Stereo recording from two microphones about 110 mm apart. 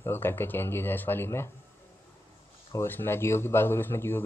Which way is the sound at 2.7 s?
20° left (ahead or behind).